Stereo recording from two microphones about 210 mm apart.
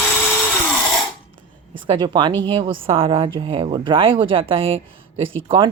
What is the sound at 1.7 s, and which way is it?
Speech, 20° right (ahead or behind).